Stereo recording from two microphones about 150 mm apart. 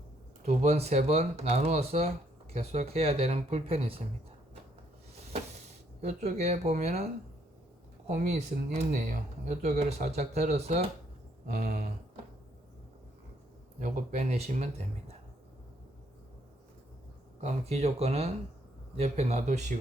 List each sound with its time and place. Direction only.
0.4 s speech: 45° right (ahead or behind)
6.0 s speech: 50° right (ahead or behind)
13.7 s speech: 55° right (ahead or behind)
17.4 s speech: 45° right (ahead or behind)